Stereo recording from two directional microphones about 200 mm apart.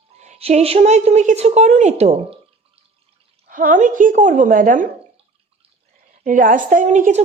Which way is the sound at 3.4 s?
45° right (ahead or behind).